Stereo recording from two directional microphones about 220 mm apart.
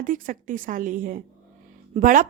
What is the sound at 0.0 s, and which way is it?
A woman's voice, 35° right (ahead or behind).